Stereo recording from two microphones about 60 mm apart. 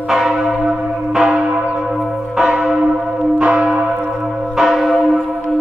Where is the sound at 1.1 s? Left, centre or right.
Centre.